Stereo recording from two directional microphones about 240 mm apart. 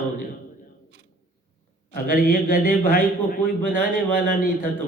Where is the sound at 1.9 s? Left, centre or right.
Left.